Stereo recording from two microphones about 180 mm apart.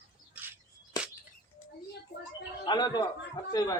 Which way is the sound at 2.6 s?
25° left (ahead or behind).